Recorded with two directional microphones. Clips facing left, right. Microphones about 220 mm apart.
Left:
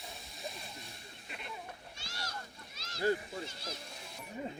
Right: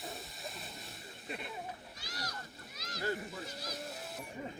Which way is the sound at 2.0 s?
25° left (ahead or behind).